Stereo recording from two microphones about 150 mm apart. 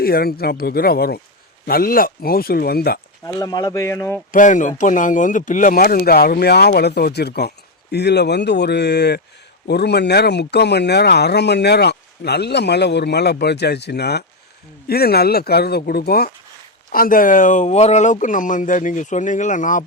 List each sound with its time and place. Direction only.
0.0 s speech: 90° left
1.6 s speech: 75° left (ahead or behind)
3.2 s speech: 25° left (ahead or behind)
4.3 s speech: 60° left (ahead or behind); by 16.3 s 90° left
16.9 s speech: 70° left (ahead or behind)